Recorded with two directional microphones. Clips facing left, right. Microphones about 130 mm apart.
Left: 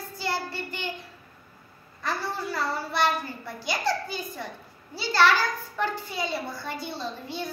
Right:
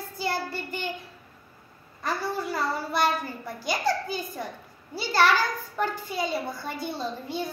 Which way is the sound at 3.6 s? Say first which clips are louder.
Right 1 dB; 45° right (ahead or behind).